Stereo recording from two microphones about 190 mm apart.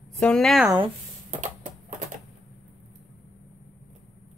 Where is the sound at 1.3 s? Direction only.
40° right (ahead or behind).